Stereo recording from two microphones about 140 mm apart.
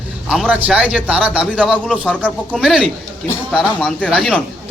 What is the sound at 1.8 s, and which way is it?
A man's voice, 5° left (ahead or behind).